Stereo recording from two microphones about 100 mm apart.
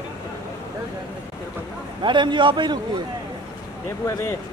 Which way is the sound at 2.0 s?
55° right (ahead or behind).